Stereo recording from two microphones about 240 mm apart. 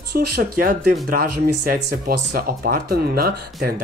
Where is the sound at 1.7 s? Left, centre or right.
Right.